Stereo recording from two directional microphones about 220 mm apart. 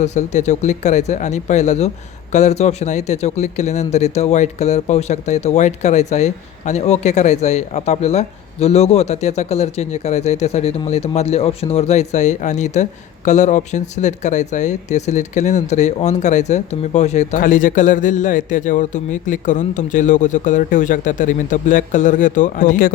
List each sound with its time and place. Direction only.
0.0 s speech: 30° left (ahead or behind)